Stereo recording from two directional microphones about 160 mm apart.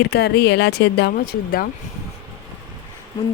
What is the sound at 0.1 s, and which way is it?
Speech, 90° left.